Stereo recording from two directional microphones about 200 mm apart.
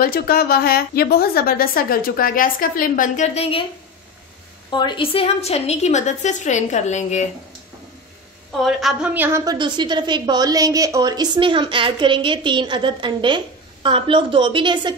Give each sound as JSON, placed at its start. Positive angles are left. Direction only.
{"t": 0.0, "sound": "a woman's voice", "side_deg": 50}
{"t": 4.6, "sound": "a woman's voice", "side_deg": 20}
{"t": 8.5, "sound": "a woman's voice", "side_deg": 0}